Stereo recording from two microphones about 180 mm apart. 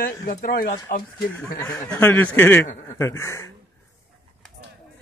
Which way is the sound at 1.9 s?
10° left (ahead or behind).